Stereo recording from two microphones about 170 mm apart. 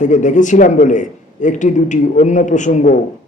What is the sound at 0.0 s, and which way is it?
A man's voice, 45° left (ahead or behind).